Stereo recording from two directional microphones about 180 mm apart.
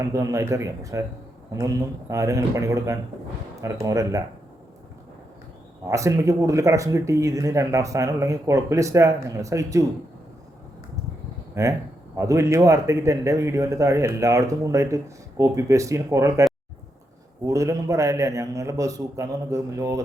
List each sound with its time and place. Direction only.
0.1 s a man's voice: 15° right (ahead or behind)
5.8 s a man's voice: 15° right (ahead or behind)
11.6 s a man's voice: 15° right (ahead or behind)
17.4 s a man's voice: 15° right (ahead or behind)